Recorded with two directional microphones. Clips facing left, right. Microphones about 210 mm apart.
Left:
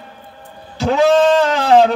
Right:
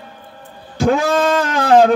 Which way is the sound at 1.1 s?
30° left (ahead or behind).